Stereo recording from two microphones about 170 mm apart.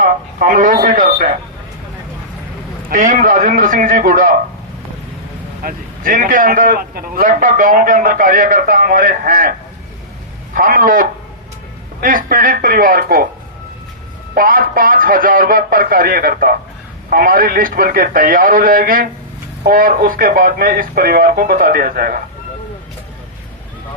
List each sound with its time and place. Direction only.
0.0 s speech: 50° right (ahead or behind)
2.9 s a man's voice: 50° right (ahead or behind)
5.6 s a man's voice: 50° right (ahead or behind)
10.5 s a man's voice: 55° right (ahead or behind)
14.3 s speech: 55° right (ahead or behind)